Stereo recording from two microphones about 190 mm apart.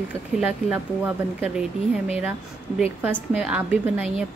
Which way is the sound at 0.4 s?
5° right (ahead or behind).